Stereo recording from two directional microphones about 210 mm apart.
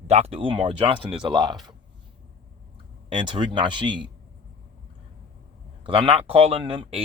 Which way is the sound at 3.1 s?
25° right (ahead or behind).